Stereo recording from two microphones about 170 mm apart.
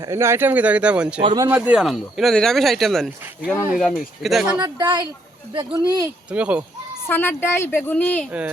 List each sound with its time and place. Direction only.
0.1 s speech: 15° right (ahead or behind)
1.2 s speech: 25° right (ahead or behind)
1.5 s speech: 10° right (ahead or behind)
4.4 s speech: 25° right (ahead or behind)
6.3 s speech: 5° right (ahead or behind)
7.1 s speech: 15° left (ahead or behind)